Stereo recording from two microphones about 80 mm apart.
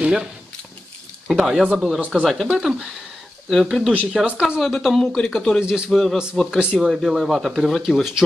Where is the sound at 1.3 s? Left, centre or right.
Centre.